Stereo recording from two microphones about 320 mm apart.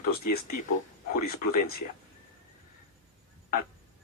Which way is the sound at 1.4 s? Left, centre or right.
Left.